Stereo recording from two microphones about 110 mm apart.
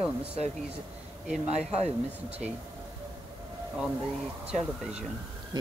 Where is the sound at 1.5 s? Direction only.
70° right (ahead or behind).